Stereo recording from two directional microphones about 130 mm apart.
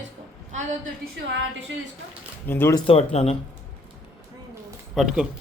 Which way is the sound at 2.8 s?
50° left (ahead or behind).